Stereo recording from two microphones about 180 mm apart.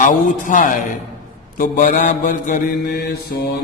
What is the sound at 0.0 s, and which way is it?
Mantra, 45° left (ahead or behind).